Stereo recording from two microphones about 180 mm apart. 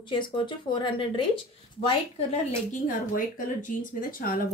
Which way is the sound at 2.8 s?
50° left (ahead or behind).